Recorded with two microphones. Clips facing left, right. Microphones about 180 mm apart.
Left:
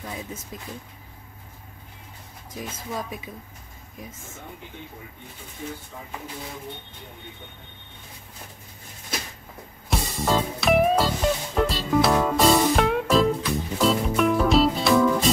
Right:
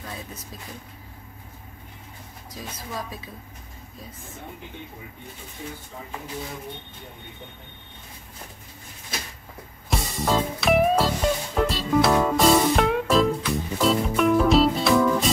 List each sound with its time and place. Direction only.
2.9 s speech: 15° left (ahead or behind)
9.8 s music: centre (ahead or behind)